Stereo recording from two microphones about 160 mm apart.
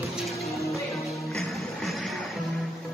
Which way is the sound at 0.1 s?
Centre (ahead or behind).